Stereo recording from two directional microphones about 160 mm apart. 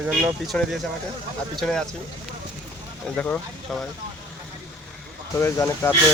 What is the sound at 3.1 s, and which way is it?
Speech, 10° left (ahead or behind).